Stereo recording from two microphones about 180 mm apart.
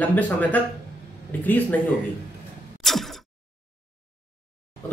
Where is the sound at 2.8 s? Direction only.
Centre (ahead or behind).